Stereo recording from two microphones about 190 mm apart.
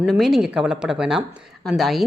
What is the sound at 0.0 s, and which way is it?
Speech, centre (ahead or behind).